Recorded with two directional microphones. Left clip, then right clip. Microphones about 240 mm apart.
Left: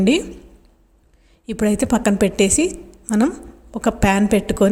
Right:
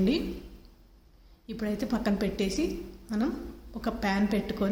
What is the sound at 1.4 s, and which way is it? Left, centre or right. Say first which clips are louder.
A woman's voice: left 14 dB; left.